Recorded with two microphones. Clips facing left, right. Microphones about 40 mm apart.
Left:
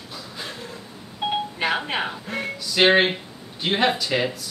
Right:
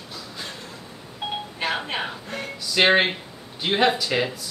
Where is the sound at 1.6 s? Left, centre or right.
Centre.